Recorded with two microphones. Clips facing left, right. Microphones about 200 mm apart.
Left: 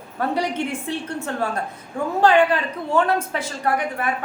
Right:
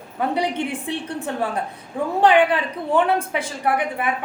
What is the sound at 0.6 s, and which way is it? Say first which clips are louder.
A woman's voice: even; 15° right (ahead or behind).